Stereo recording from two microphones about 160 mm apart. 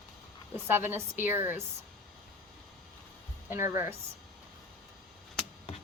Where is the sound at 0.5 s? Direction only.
15° right (ahead or behind).